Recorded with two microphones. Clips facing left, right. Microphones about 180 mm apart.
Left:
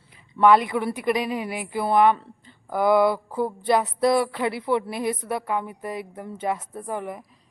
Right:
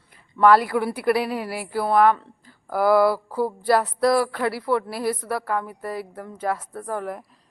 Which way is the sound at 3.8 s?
Centre (ahead or behind).